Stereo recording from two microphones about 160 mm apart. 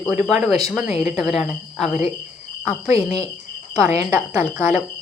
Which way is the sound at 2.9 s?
40° left (ahead or behind).